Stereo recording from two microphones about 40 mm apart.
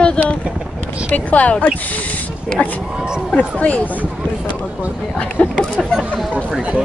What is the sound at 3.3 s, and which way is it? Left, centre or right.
Speech, left.